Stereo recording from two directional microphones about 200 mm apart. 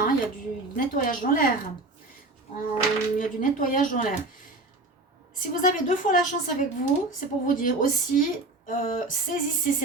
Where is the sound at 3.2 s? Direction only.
40° left (ahead or behind).